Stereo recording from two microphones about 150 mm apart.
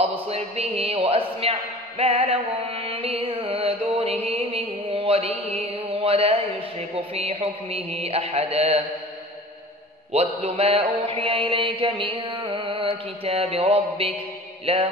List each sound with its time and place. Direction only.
0.0 s a man's voice: 40° right (ahead or behind)
7.2 s mantra: 40° right (ahead or behind)
10.1 s mantra: 40° right (ahead or behind)